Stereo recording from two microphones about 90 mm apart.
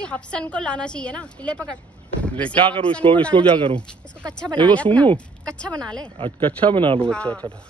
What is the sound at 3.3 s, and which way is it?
Speech, 70° right (ahead or behind).